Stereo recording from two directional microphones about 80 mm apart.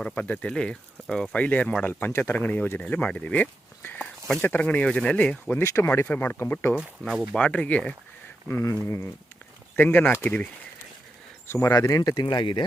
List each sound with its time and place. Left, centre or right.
0.0 s speech: centre
5.5 s speech: left
5.9 s speech: left
8.7 s speech: left; by 10.5 s centre
11.4 s speech: left
11.7 s speech: left
12.2 s speech: left